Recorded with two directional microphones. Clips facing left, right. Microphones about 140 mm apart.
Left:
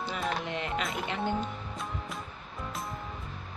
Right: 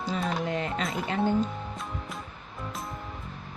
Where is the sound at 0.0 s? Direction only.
40° right (ahead or behind).